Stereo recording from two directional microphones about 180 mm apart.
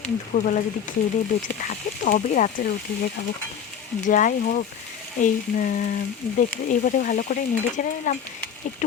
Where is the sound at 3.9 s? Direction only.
45° left (ahead or behind).